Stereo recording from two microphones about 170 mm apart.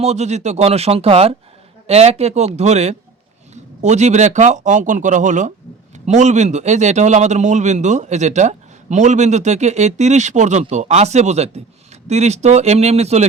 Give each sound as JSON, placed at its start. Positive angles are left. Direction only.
{"t": 0.0, "sound": "a man's voice", "side_deg": -40}